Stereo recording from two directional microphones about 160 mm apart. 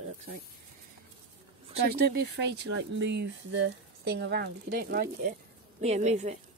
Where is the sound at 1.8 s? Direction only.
75° right (ahead or behind).